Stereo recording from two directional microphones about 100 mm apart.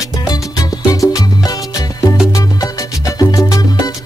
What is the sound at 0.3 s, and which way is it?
Music, 35° left (ahead or behind).